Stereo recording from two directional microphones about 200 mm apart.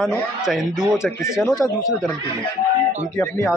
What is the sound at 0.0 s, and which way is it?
Speech, centre (ahead or behind).